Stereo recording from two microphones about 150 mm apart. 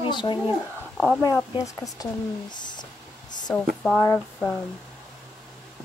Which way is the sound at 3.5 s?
10° left (ahead or behind).